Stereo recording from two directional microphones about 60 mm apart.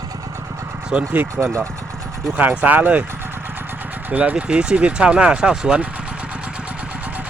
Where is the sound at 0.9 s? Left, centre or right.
Right.